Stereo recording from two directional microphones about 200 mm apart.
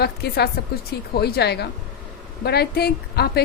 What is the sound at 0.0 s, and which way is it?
A woman's voice, 55° left (ahead or behind).